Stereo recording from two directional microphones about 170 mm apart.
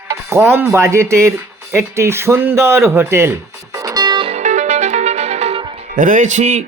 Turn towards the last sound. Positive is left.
turn(degrees=-45)  # may be behind; listen again after turning